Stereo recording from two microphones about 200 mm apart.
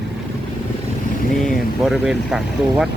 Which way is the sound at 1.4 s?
Centre (ahead or behind).